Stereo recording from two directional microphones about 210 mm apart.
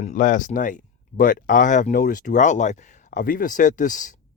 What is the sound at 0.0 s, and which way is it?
Speech, 35° left (ahead or behind).